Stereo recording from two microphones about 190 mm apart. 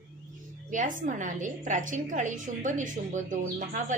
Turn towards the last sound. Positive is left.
turn(degrees=-40)  # may be behind; listen again after turning